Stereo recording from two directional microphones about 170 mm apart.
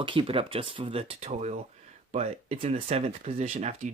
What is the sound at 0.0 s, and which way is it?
Speech, 30° right (ahead or behind).